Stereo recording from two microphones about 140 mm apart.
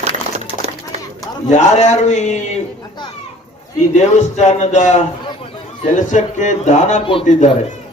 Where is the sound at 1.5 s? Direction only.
55° left (ahead or behind).